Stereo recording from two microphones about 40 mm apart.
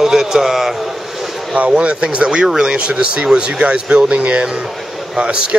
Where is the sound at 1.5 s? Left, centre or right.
Right.